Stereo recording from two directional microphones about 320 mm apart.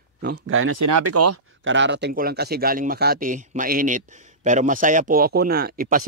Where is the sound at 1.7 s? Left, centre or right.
Right.